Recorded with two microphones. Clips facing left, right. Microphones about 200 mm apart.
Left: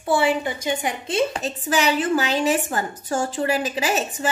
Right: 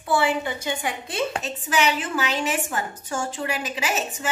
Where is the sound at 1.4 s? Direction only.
35° left (ahead or behind).